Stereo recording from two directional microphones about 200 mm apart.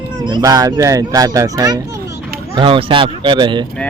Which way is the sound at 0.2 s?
20° right (ahead or behind).